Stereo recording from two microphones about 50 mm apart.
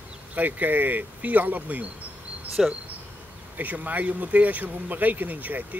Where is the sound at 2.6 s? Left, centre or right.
Centre.